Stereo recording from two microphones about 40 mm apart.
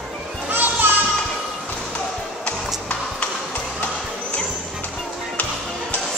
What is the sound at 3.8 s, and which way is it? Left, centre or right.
Basketball bounce, left.